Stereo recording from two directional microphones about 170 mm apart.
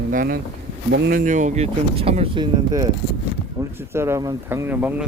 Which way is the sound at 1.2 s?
45° right (ahead or behind).